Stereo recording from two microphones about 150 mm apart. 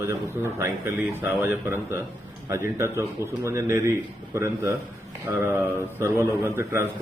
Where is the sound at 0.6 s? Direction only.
10° right (ahead or behind).